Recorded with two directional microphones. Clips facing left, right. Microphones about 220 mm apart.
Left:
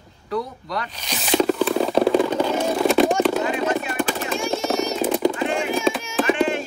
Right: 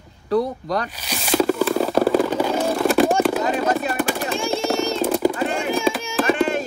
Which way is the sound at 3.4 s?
40° right (ahead or behind).